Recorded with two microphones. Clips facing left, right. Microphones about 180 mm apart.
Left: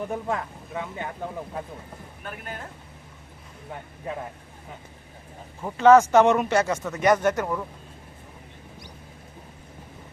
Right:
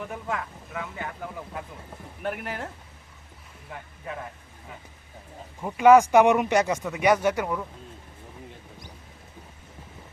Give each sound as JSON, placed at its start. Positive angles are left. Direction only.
{"t": 0.0, "sound": "speech", "side_deg": 30}
{"t": 2.2, "sound": "speech", "side_deg": -70}
{"t": 5.6, "sound": "speech", "side_deg": -10}